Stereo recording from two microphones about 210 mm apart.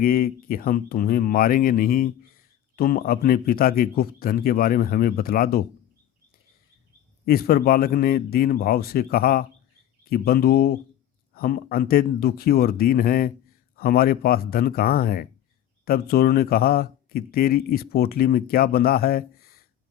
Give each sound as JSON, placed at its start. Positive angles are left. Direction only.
{"t": 0.0, "sound": "speech", "side_deg": 45}
{"t": 7.3, "sound": "speech", "side_deg": 45}